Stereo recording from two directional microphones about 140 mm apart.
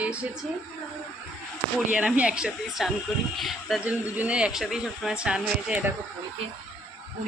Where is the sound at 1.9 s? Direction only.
10° right (ahead or behind).